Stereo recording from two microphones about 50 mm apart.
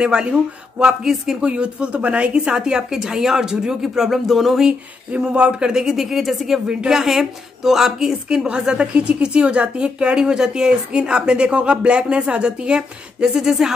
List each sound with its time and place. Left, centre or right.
0.0 s a woman's voice: centre
1.4 s a woman's voice: right; by 4.6 s centre
5.1 s a woman's voice: right